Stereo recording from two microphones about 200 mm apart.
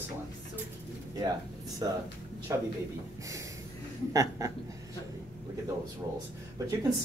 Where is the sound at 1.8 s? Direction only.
20° right (ahead or behind).